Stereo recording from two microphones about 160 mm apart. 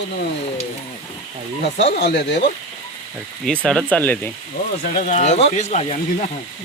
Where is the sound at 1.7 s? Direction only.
90° left.